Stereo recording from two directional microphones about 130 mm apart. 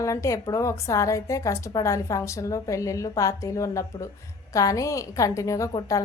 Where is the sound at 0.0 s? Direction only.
25° left (ahead or behind).